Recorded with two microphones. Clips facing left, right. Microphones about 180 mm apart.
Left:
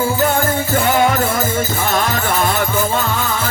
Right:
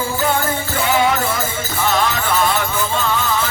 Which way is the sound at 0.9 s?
50° left (ahead or behind).